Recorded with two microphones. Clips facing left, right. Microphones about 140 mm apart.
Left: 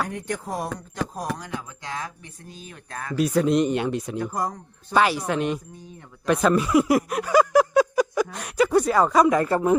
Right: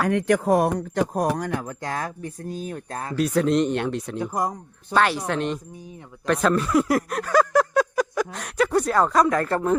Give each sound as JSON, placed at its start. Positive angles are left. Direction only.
{"t": 0.1, "sound": "speech", "side_deg": -90}
{"t": 3.2, "sound": "speech", "side_deg": 5}
{"t": 4.2, "sound": "speech", "side_deg": -15}
{"t": 4.9, "sound": "speech", "side_deg": 5}